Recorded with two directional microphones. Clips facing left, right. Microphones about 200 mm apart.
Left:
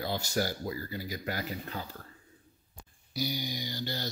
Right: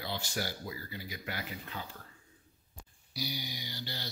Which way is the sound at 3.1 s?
50° left (ahead or behind).